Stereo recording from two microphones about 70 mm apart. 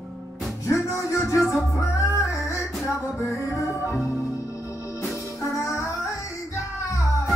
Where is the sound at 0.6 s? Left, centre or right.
Left.